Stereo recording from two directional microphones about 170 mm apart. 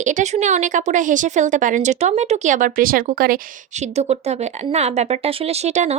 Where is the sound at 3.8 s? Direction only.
40° right (ahead or behind).